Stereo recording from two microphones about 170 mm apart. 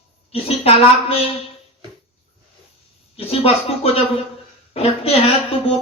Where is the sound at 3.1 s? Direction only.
35° left (ahead or behind).